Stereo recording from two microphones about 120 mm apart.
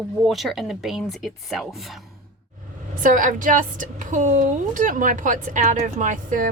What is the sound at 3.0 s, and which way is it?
A woman's voice, 90° right.